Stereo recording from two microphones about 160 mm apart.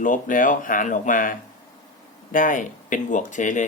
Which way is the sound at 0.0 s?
55° left (ahead or behind).